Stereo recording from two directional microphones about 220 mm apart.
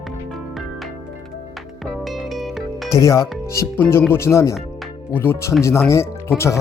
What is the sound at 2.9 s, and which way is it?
Speech, 15° left (ahead or behind).